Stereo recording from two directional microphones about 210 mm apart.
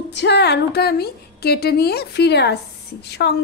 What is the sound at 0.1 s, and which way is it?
A woman's voice, 55° left (ahead or behind).